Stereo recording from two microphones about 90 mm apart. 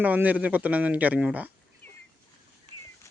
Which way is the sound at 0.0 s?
20° right (ahead or behind).